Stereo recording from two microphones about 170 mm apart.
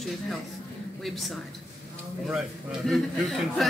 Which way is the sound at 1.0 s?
Centre (ahead or behind).